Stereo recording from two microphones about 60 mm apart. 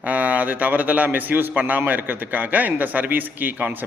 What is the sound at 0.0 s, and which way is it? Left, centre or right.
A man's voice, right.